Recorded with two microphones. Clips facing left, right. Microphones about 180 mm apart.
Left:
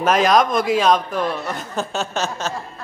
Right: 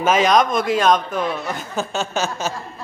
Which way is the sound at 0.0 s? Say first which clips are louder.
Even; centre (ahead or behind).